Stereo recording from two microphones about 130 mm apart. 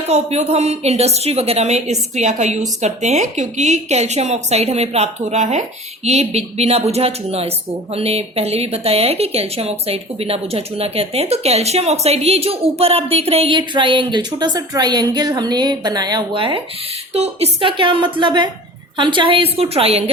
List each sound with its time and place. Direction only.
0.1 s a woman's voice: 55° right (ahead or behind)
13.6 s a woman's voice: 40° right (ahead or behind)